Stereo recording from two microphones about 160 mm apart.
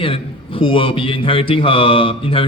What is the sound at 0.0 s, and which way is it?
A man's voice, 35° left (ahead or behind).